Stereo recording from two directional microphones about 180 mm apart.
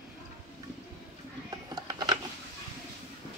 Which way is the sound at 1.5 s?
20° right (ahead or behind).